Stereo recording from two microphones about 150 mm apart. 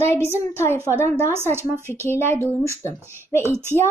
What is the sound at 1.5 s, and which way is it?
Speech, 15° right (ahead or behind).